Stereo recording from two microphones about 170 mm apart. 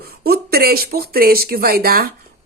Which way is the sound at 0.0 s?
65° right (ahead or behind).